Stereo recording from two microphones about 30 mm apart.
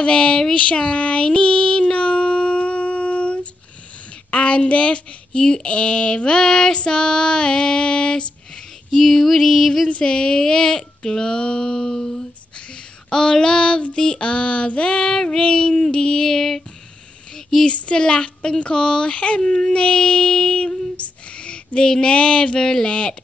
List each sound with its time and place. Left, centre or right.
0.0 s speech: left
1.2 s child singing: left
4.3 s speech: left
6.5 s speech: centre
8.9 s female singing: centre
10.0 s speech: left
16.3 s female singing: centre
17.6 s speech: left
20.9 s a sound: left
21.7 s speech: left